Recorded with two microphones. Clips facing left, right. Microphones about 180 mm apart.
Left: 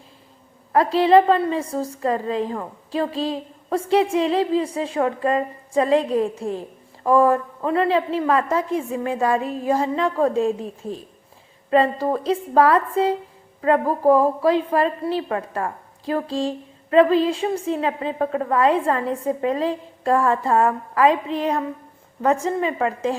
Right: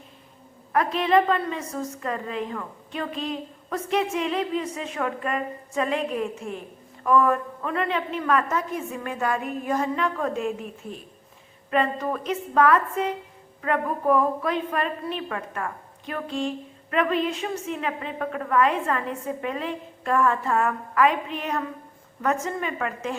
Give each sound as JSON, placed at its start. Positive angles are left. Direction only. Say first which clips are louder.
{"t": 0.7, "sound": "a woman's voice", "louder": "left 6 dB", "side_deg": 30}